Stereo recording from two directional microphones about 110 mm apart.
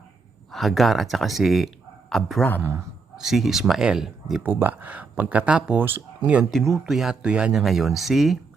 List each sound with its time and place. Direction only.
0.5 s speech: centre (ahead or behind)
2.6 s speech: 20° right (ahead or behind)
3.2 s speech: 5° right (ahead or behind)
4.4 s speech: 15° right (ahead or behind)
6.5 s speech: centre (ahead or behind)